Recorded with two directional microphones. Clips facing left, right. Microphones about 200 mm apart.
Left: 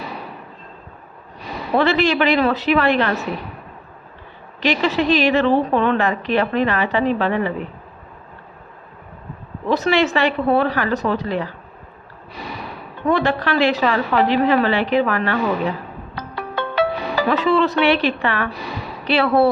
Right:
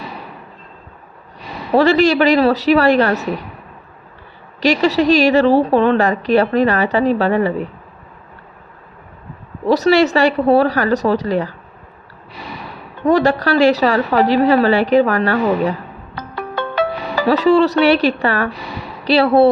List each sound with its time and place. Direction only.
1.7 s a woman's voice: 40° right (ahead or behind)
4.6 s a woman's voice: 40° right (ahead or behind)
9.6 s a woman's voice: 40° right (ahead or behind)
13.1 s a woman's voice: 40° right (ahead or behind)
16.1 s music: 50° right (ahead or behind)
17.2 s a woman's voice: 40° right (ahead or behind)